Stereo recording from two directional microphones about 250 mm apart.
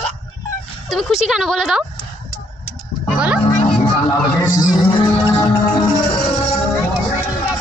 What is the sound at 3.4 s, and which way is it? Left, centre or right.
Music, centre.